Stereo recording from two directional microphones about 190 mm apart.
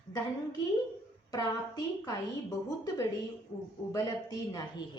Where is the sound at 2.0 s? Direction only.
20° left (ahead or behind).